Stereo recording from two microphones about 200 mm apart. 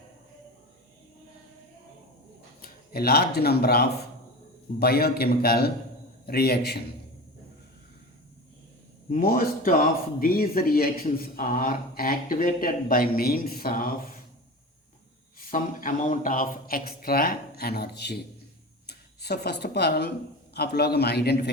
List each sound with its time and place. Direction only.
2.6 s a man's voice: 50° left (ahead or behind)
9.0 s a man's voice: 40° left (ahead or behind)
15.4 s a man's voice: 45° left (ahead or behind)